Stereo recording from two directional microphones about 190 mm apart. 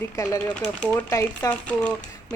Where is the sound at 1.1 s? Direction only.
15° left (ahead or behind).